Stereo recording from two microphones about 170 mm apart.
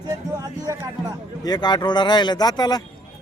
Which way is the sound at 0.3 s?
20° right (ahead or behind).